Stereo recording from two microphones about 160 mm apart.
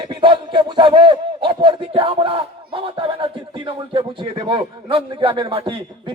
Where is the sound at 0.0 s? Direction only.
30° right (ahead or behind).